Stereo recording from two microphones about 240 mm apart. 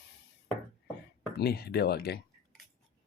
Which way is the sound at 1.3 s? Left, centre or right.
Left.